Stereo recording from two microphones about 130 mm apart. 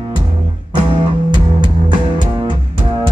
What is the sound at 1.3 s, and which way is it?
Music, 35° right (ahead or behind).